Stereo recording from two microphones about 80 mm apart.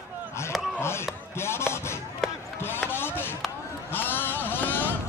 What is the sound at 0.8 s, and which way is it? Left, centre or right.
Music, left.